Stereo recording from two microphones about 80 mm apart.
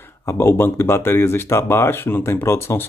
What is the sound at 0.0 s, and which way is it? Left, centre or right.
Speech, left.